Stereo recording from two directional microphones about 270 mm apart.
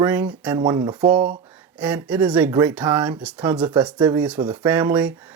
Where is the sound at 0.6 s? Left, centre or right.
Centre.